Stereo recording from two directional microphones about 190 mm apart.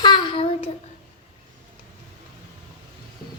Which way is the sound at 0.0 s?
25° left (ahead or behind).